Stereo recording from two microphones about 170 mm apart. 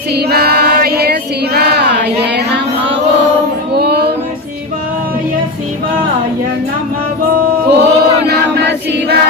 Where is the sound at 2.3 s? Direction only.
80° right.